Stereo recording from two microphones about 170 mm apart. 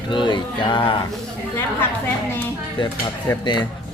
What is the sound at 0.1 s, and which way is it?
Speech, 30° left (ahead or behind).